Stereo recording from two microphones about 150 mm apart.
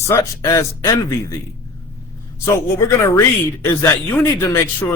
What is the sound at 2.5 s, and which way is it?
A man's voice, 20° left (ahead or behind).